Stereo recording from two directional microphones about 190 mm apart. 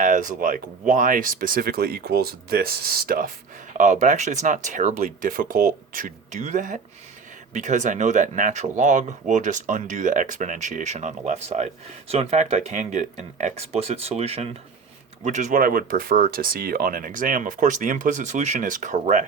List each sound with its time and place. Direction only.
0.0 s speech: 45° right (ahead or behind)